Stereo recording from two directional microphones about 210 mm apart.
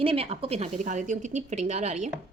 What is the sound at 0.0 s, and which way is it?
A woman's voice, 25° right (ahead or behind).